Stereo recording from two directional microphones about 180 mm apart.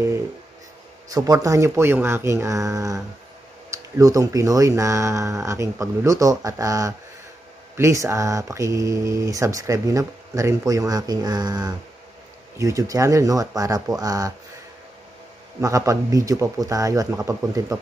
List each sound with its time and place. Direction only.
1.1 s speech: 20° right (ahead or behind)
15.6 s speech: 20° right (ahead or behind)